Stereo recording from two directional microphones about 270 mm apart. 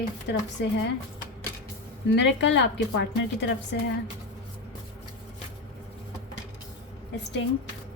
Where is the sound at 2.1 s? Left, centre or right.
Left.